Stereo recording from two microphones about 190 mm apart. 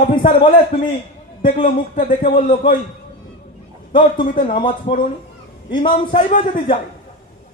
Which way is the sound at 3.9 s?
25° left (ahead or behind).